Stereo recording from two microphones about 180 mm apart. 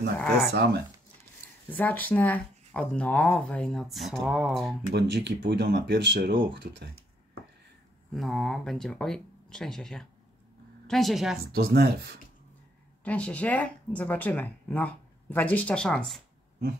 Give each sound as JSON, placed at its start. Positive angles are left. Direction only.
{"t": 0.5, "sound": "speech", "side_deg": -65}
{"t": 1.7, "sound": "speech", "side_deg": 10}
{"t": 4.9, "sound": "speech", "side_deg": -70}
{"t": 8.1, "sound": "speech", "side_deg": 0}
{"t": 11.5, "sound": "speech", "side_deg": -60}
{"t": 13.0, "sound": "speech", "side_deg": 5}